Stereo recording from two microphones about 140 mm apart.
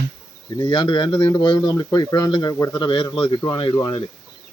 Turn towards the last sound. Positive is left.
turn(degrees=35)  # may be behind; listen again after turning